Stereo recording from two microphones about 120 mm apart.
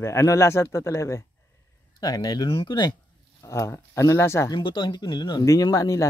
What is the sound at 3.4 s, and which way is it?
Speech, 25° left (ahead or behind).